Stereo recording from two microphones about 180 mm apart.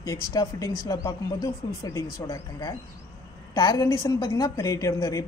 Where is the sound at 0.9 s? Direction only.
20° left (ahead or behind).